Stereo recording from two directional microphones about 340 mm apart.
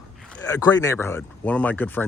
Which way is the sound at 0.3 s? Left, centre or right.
Centre.